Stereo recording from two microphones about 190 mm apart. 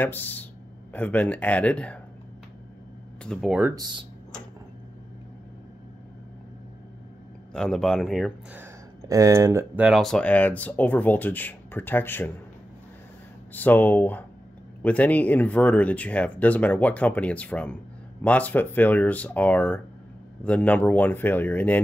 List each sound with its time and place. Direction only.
0.0 s speech: 10° left (ahead or behind)
3.3 s speech: centre (ahead or behind)
3.7 s speech: 20° right (ahead or behind)
7.5 s speech: 5° left (ahead or behind)
8.5 s speech: 15° right (ahead or behind); by 12.3 s 10° left (ahead or behind)
13.5 s speech: 10° left (ahead or behind)